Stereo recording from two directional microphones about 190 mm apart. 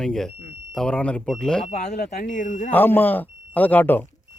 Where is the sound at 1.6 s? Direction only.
35° left (ahead or behind).